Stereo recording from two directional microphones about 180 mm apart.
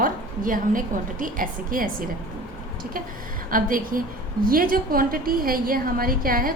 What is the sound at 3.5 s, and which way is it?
A woman's voice, 50° right (ahead or behind).